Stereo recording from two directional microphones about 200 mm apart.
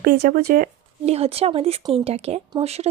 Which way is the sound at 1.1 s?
30° right (ahead or behind).